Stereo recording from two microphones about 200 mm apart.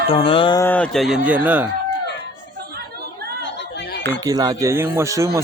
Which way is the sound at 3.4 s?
60° left (ahead or behind).